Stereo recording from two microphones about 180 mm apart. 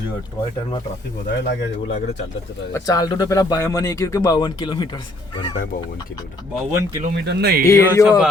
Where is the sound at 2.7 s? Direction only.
20° left (ahead or behind).